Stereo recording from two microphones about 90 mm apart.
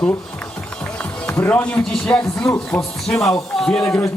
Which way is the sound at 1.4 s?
15° left (ahead or behind).